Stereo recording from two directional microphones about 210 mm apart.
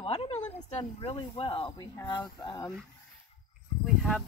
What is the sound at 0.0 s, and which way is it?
Speech, 30° left (ahead or behind).